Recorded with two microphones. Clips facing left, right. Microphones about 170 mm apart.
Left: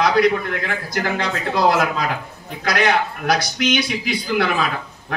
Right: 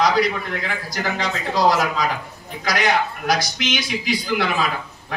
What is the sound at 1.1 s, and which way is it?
A man's voice, 60° left (ahead or behind).